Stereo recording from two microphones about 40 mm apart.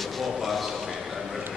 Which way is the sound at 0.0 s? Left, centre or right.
Centre.